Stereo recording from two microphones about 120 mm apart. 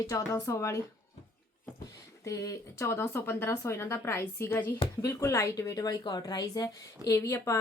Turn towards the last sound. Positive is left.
turn(degrees=20)  # may be behind; listen again after turning